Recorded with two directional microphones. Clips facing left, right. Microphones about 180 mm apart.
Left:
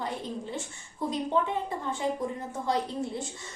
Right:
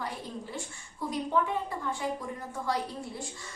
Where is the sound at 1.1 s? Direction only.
20° left (ahead or behind).